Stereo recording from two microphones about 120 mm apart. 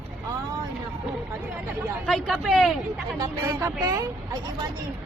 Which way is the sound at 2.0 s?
5° left (ahead or behind).